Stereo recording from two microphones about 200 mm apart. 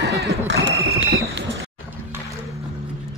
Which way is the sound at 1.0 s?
65° right (ahead or behind).